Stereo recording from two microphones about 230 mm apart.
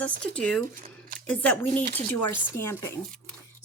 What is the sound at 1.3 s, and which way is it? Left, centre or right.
Speech, centre.